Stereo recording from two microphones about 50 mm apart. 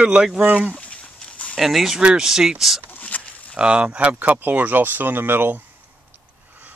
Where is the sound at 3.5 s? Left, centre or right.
Right.